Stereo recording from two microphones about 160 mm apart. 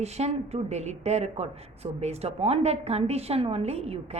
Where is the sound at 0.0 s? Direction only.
40° right (ahead or behind).